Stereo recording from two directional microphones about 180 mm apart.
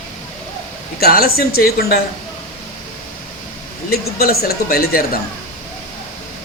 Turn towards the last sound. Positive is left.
turn(degrees=55)  # may be behind; listen again after turning